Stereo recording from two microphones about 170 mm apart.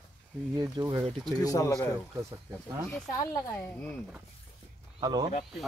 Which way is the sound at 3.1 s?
20° left (ahead or behind).